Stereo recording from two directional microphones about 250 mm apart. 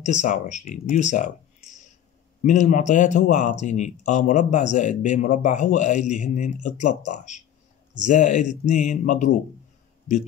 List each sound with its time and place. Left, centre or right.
0.0 s speech: left